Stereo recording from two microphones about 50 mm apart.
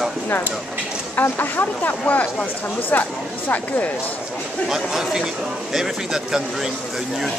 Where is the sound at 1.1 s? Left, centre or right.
Left.